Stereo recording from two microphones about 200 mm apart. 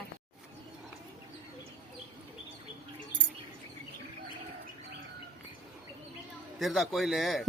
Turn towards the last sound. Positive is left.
turn(degrees=0)  # may be behind; listen again after turning